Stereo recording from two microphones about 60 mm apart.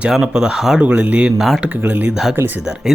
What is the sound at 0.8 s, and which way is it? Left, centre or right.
Speech, right.